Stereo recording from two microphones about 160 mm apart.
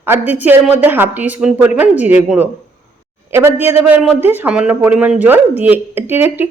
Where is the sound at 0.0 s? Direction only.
10° right (ahead or behind).